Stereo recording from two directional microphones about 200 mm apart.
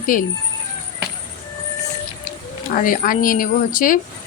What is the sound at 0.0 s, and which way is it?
Speech, 40° left (ahead or behind).